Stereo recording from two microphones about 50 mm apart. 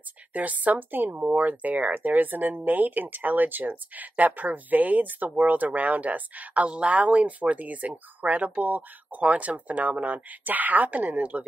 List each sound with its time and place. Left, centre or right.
0.3 s speech: right